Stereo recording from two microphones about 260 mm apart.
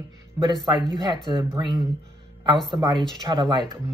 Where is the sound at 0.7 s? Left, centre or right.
Centre.